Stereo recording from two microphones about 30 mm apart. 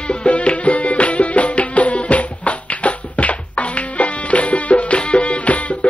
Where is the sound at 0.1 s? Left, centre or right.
Left.